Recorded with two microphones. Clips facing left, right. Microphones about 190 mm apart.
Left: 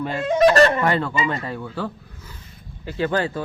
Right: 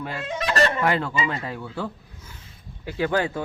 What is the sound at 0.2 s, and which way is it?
Speech, 45° left (ahead or behind).